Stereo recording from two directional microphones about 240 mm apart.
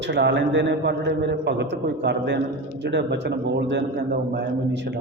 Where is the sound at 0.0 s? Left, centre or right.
Right.